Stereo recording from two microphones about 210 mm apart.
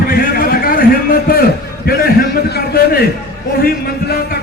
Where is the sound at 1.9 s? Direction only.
50° left (ahead or behind).